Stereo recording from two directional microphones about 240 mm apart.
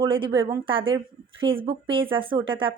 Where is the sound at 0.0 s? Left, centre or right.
Centre.